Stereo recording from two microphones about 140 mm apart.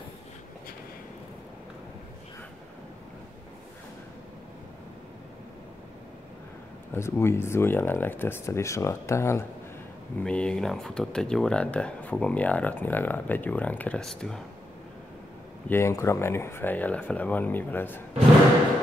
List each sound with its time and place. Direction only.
6.9 s speech: 20° left (ahead or behind)
10.2 s speech: 5° left (ahead or behind)
15.7 s speech: 20° left (ahead or behind)